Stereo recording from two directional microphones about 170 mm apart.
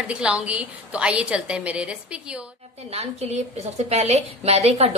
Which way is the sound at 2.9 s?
40° right (ahead or behind).